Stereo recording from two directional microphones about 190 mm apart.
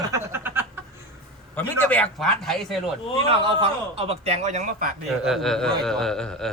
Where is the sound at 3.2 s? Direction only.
30° right (ahead or behind).